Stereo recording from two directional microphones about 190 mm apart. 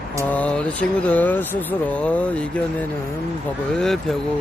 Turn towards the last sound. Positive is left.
turn(degrees=0)  # may be behind; listen again after turning